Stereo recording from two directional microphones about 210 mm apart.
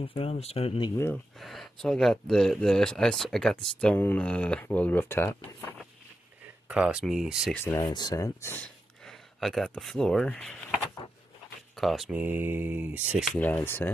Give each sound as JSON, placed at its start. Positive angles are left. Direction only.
{"t": 0.0, "sound": "speech", "side_deg": 25}
{"t": 1.3, "sound": "speech", "side_deg": 0}
{"t": 6.7, "sound": "speech", "side_deg": -5}
{"t": 7.5, "sound": "speech", "side_deg": 15}